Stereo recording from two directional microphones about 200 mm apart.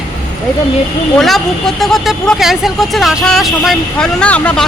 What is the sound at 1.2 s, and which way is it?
Speech, centre (ahead or behind).